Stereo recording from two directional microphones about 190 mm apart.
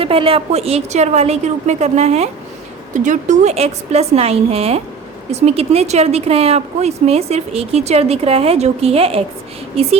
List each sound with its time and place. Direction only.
0.0 s a woman's voice: 30° right (ahead or behind)